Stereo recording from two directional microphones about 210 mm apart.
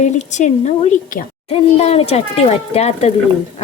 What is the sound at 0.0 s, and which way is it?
A child's voice, 35° left (ahead or behind).